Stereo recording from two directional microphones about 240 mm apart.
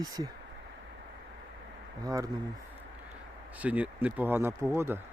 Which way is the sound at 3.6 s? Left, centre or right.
Centre.